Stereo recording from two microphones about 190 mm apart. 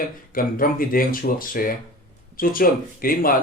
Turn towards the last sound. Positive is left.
turn(degrees=50)  # may be behind; listen again after turning